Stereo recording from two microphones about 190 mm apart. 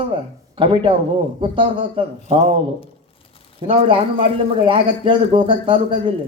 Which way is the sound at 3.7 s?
30° right (ahead or behind).